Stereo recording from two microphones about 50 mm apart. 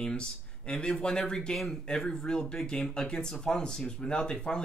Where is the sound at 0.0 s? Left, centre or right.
Centre.